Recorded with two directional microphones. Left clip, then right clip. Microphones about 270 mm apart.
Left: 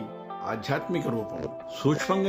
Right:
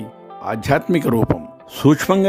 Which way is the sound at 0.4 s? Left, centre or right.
Right.